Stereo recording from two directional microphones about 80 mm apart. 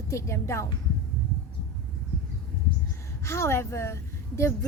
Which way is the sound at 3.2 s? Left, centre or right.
Left.